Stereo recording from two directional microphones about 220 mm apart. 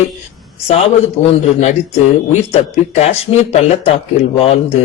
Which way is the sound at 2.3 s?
30° left (ahead or behind).